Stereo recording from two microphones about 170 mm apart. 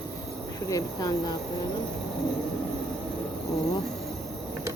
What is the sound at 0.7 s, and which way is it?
Speech, 20° left (ahead or behind).